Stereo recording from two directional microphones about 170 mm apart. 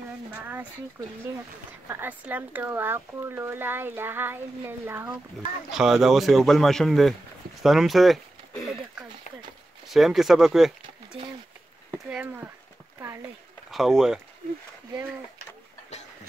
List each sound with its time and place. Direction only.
0.4 s speech: 10° right (ahead or behind)
1.7 s speech: 10° right (ahead or behind)
5.7 s speech: 5° right (ahead or behind)
9.8 s speech: centre (ahead or behind)
12.1 s speech: 10° right (ahead or behind)
13.0 s a sound: 15° right (ahead or behind)
13.7 s speech: centre (ahead or behind)